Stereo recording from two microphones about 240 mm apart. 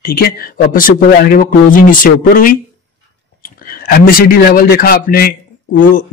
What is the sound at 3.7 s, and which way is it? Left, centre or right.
A man's voice, left.